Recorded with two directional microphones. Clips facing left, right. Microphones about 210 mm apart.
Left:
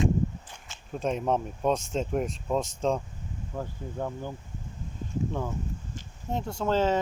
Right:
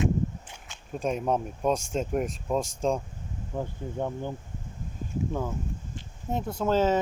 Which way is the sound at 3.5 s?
15° right (ahead or behind).